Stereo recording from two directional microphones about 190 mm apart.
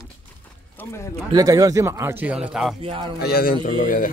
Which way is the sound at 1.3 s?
20° right (ahead or behind).